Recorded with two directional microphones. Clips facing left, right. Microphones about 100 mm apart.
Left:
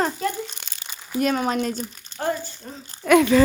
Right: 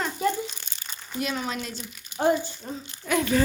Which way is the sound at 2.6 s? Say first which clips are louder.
Right 3 dB; 10° right (ahead or behind).